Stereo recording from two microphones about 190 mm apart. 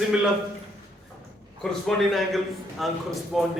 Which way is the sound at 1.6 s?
Centre (ahead or behind).